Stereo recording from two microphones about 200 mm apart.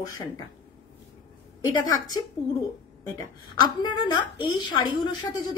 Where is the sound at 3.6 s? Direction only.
20° left (ahead or behind).